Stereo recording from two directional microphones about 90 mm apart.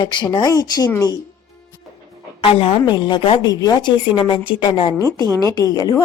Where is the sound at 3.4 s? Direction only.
45° left (ahead or behind); by 4.9 s 75° left (ahead or behind).